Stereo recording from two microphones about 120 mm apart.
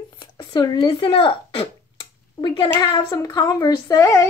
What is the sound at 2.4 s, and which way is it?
Speech, 40° left (ahead or behind).